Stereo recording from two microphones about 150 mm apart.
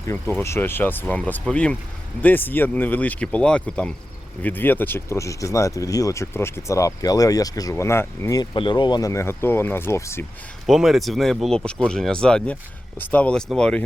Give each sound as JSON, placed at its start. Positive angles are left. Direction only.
{"t": 0.1, "sound": "speech", "side_deg": 15}
{"t": 10.7, "sound": "speech", "side_deg": 0}